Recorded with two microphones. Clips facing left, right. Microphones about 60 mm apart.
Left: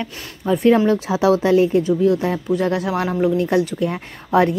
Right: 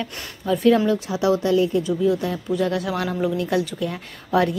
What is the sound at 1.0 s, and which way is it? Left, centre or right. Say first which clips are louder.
Speech: left 4 dB; left.